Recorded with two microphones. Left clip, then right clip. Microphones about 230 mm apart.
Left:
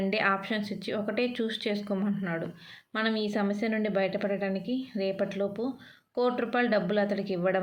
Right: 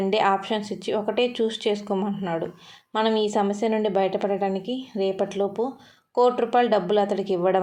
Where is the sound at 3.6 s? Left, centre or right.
Right.